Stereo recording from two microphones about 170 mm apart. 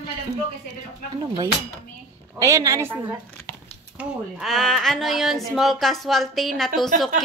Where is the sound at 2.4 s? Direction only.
20° right (ahead or behind).